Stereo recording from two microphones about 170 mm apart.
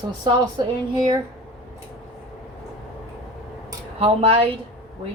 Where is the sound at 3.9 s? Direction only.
35° right (ahead or behind).